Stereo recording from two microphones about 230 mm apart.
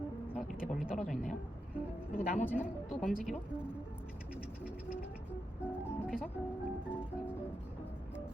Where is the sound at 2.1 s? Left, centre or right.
Left.